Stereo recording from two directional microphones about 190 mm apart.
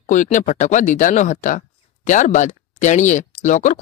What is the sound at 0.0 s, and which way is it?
Speech, 40° left (ahead or behind).